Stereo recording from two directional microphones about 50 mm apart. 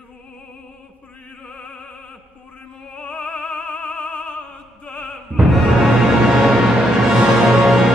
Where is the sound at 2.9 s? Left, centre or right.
Left.